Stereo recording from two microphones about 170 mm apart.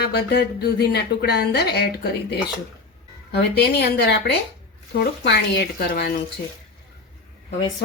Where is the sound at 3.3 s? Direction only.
70° left (ahead or behind).